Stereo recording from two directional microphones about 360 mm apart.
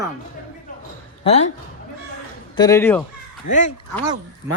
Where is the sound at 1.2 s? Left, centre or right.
Centre.